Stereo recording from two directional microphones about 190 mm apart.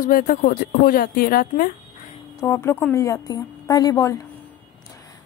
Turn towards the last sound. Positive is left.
turn(degrees=20)  # may be behind; listen again after turning